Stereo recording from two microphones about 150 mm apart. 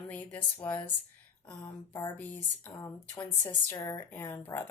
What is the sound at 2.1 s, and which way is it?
A woman's voice, 15° left (ahead or behind).